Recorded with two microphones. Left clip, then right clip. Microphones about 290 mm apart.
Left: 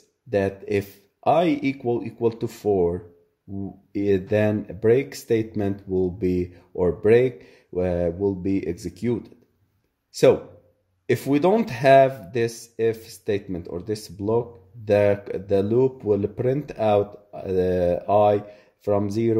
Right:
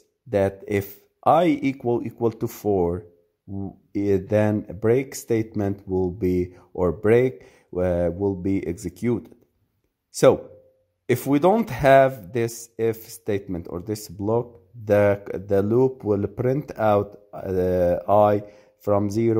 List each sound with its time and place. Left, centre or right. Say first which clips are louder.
0.3 s speech: right 1 dB; right
11.1 s speech: right 1 dB; right